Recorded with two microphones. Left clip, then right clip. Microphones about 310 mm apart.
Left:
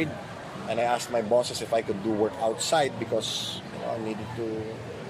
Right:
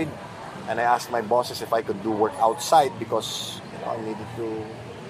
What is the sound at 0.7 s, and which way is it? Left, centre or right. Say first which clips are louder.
Speech: right 4 dB; right.